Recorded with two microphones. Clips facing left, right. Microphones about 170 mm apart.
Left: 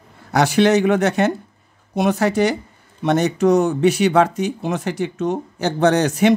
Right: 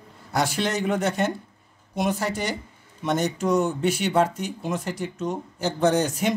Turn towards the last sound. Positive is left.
turn(degrees=75)  # may be behind; listen again after turning